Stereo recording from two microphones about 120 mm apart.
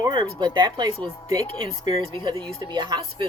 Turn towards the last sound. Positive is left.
turn(degrees=-40)  # may be behind; listen again after turning